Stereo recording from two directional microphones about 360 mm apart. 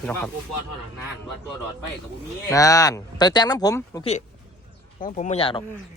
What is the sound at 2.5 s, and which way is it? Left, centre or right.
Speech, centre.